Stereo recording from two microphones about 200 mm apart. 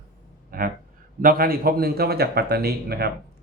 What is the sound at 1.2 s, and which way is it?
A man's voice, 45° right (ahead or behind).